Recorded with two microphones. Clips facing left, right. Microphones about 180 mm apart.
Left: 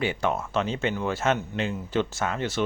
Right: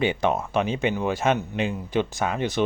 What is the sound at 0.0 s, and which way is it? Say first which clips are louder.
Speech: right 3 dB; 20° right (ahead or behind).